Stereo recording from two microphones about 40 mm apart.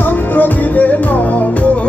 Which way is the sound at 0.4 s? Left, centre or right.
Left.